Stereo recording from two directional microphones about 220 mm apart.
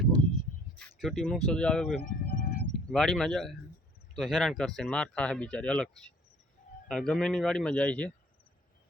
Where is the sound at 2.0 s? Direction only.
40° left (ahead or behind).